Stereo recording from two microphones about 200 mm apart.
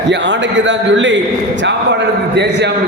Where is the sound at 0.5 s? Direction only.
70° right (ahead or behind).